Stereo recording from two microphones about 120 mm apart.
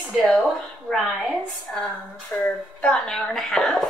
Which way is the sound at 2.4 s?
10° left (ahead or behind).